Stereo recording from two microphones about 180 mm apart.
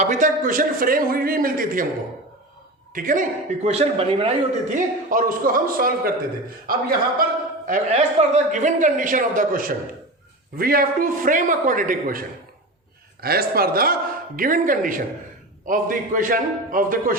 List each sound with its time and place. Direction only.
0.0 s a man's voice: 45° right (ahead or behind)
2.9 s a man's voice: 50° right (ahead or behind)
3.7 s speech: 35° right (ahead or behind)
4.7 s a man's voice: 50° right (ahead or behind)
7.7 s a man's voice: 40° right (ahead or behind)
13.2 s a man's voice: 60° right (ahead or behind)